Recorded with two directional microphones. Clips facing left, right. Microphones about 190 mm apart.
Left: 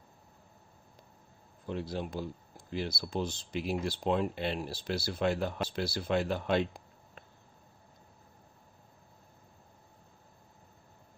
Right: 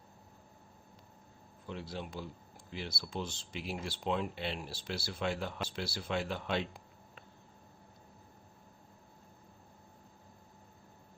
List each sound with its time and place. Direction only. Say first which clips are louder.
1.9 s speech: left 6 dB; 40° left (ahead or behind)